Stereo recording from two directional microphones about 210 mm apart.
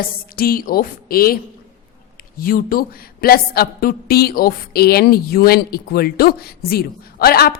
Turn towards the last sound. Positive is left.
turn(degrees=45)  # may be behind; listen again after turning